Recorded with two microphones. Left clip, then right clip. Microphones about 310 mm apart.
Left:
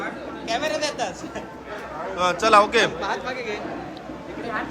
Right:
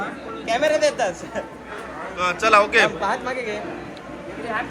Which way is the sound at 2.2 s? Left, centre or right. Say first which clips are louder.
Even; centre.